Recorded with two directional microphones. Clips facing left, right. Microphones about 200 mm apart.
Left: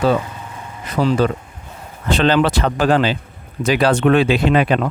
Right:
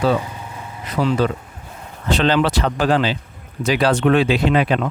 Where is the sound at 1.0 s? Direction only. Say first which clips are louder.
Left 2 dB; 40° left (ahead or behind).